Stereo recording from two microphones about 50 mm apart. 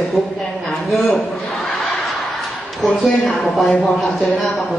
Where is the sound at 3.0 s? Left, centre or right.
Centre.